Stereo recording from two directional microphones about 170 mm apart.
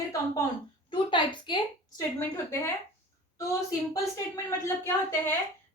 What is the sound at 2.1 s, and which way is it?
Speech, 15° left (ahead or behind).